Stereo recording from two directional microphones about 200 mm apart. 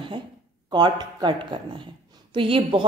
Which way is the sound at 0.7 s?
20° right (ahead or behind).